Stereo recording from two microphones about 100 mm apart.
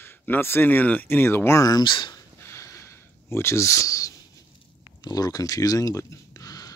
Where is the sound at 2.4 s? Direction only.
30° left (ahead or behind).